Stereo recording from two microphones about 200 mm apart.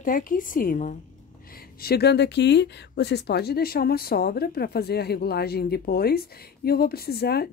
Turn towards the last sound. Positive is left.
turn(degrees=50)  # may be behind; listen again after turning